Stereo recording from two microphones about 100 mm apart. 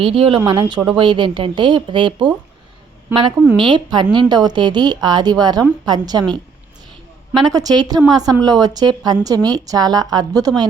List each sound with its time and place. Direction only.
0.0 s a woman's voice: 65° right (ahead or behind); by 6.2 s 45° right (ahead or behind)
7.5 s a woman's voice: 40° right (ahead or behind)